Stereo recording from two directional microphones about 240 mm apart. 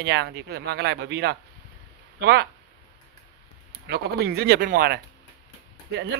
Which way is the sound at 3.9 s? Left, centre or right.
Right.